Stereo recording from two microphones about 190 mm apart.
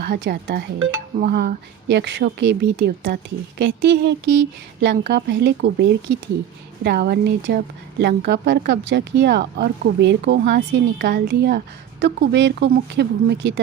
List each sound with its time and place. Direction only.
0.0 s a woman's voice: 60° right (ahead or behind); by 1.0 s 90° right
1.2 s a woman's voice: 50° right (ahead or behind)